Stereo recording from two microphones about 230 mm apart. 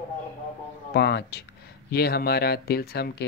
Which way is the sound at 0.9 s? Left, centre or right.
Left.